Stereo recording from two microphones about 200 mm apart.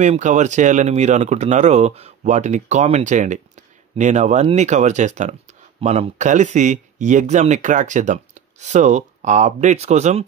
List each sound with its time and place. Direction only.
0.0 s speech: 35° right (ahead or behind)